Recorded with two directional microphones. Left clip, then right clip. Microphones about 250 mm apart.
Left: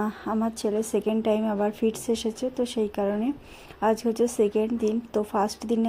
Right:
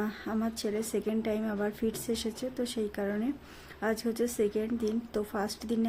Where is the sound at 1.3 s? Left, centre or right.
Centre.